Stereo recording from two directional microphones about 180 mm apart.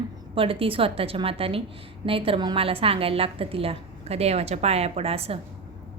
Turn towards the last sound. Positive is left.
turn(degrees=-35)  # may be behind; listen again after turning